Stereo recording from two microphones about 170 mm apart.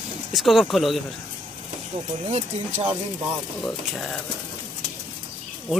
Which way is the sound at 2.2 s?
35° right (ahead or behind).